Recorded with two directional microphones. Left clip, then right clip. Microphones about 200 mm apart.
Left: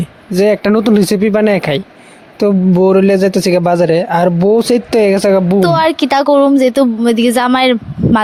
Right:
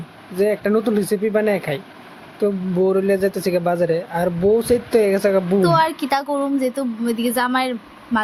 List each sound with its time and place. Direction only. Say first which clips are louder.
0.3 s speech: left 7 dB; 50° left (ahead or behind)